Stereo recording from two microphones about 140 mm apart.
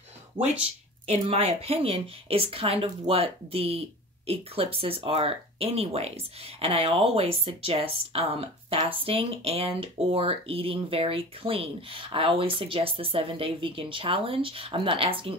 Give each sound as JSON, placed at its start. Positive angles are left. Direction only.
{"t": 0.4, "sound": "speech", "side_deg": -50}